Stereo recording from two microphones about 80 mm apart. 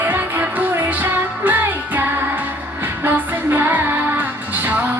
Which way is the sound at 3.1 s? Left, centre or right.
Right.